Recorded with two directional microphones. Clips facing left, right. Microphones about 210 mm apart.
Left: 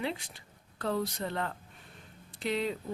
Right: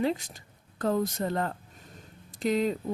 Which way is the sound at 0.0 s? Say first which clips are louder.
Right 7 dB; 40° right (ahead or behind).